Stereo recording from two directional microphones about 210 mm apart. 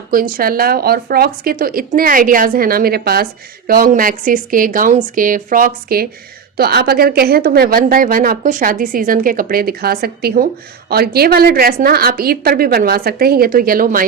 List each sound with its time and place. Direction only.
0.1 s a woman's voice: 45° right (ahead or behind)